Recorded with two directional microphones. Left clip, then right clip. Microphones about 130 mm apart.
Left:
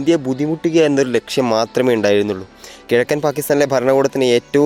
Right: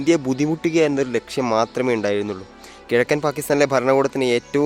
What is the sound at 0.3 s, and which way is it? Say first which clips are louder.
Speech: left 2 dB; 5° right (ahead or behind).